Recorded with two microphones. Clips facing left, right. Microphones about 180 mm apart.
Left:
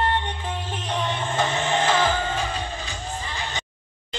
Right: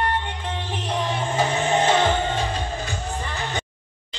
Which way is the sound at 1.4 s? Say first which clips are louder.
Right 3 dB; 20° right (ahead or behind).